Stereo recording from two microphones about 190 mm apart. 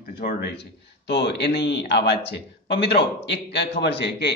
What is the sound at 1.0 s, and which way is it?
Speech, 65° left (ahead or behind).